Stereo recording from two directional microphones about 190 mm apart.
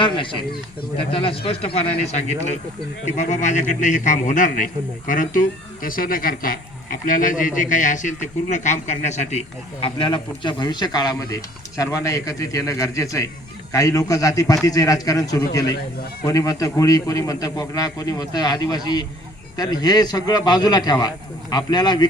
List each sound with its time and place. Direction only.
0.0 s a man's voice: 25° left (ahead or behind)